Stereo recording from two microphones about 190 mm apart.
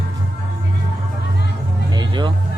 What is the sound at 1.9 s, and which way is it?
Music, 25° right (ahead or behind).